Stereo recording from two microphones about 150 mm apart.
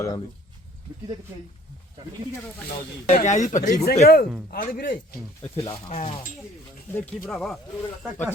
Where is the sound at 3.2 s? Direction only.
50° left (ahead or behind).